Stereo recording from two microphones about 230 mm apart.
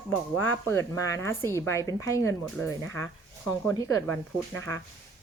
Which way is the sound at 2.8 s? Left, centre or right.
Right.